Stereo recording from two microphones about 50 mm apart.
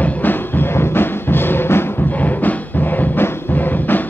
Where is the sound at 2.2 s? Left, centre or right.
Left.